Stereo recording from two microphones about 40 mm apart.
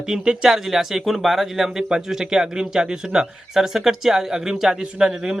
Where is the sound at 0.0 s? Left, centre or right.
Centre.